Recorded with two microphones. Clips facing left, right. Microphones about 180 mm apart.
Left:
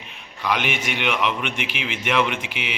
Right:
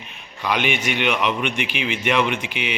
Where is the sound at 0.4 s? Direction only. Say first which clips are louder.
Right 2 dB; centre (ahead or behind).